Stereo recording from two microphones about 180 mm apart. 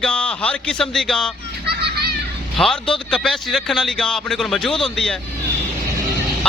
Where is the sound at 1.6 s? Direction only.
65° right (ahead or behind).